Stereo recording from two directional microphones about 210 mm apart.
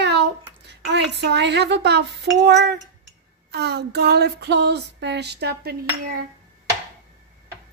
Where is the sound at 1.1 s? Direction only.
55° right (ahead or behind).